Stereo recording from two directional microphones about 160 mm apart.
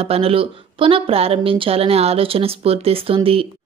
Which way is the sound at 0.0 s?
35° right (ahead or behind).